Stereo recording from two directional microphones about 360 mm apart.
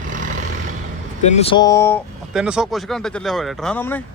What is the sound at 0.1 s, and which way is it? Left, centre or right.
Vehicle, right.